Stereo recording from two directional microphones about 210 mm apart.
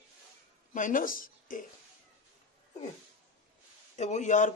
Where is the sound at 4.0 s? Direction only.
35° left (ahead or behind).